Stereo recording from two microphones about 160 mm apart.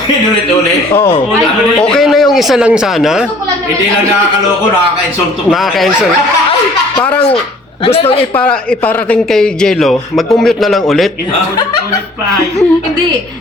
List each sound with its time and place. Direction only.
1.8 s a man's voice: centre (ahead or behind)
5.5 s a man's voice: centre (ahead or behind)
7.9 s a man's voice: 40° left (ahead or behind)
8.4 s a man's voice: 10° left (ahead or behind)